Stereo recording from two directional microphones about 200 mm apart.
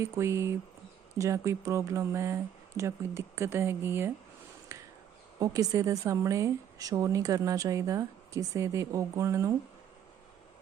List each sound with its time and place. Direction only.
0.0 s a woman's voice: 15° right (ahead or behind)
4.7 s a sound: 15° right (ahead or behind)
5.4 s a woman's voice: 15° right (ahead or behind)